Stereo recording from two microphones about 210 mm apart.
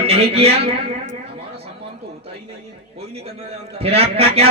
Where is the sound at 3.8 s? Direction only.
30° right (ahead or behind).